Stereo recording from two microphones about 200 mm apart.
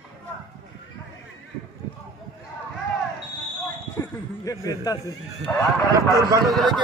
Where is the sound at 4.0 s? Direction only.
15° left (ahead or behind).